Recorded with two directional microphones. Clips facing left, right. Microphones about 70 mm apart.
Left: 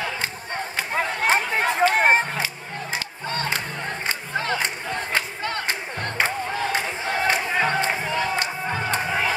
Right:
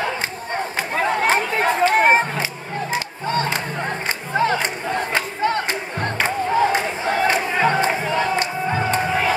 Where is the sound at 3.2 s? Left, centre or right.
Right.